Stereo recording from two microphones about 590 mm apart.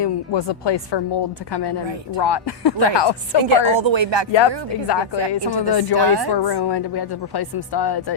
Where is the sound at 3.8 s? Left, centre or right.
Right.